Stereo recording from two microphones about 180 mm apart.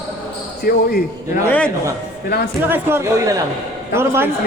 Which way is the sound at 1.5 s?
10° left (ahead or behind).